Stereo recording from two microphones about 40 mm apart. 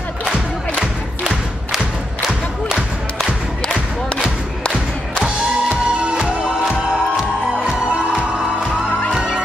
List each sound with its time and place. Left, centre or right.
5.2 s music: right
9.1 s music: centre